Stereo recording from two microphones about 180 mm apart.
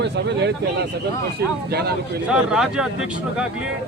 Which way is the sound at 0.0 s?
70° right (ahead or behind).